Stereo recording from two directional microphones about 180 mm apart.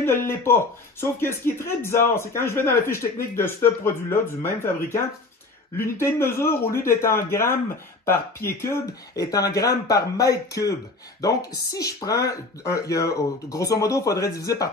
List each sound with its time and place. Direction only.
0.0 s speech: 15° left (ahead or behind)